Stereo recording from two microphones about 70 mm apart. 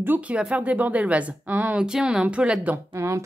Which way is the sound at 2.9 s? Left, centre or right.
Right.